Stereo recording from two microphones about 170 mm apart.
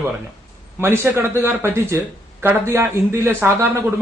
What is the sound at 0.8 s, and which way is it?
A man's voice, 15° right (ahead or behind).